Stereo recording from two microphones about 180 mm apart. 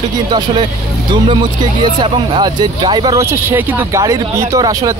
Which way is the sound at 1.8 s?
25° right (ahead or behind).